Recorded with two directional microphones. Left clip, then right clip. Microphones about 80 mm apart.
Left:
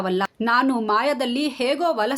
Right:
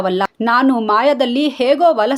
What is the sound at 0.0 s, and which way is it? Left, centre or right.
A woman's voice, right.